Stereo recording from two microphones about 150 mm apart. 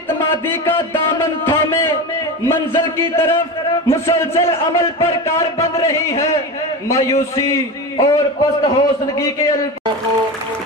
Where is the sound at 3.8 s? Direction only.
20° left (ahead or behind).